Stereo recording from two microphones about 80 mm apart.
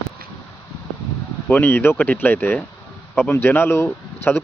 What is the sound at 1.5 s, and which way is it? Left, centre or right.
Speech, left.